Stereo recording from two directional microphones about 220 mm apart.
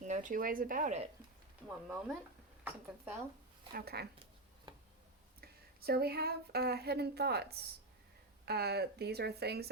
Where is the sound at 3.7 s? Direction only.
45° right (ahead or behind).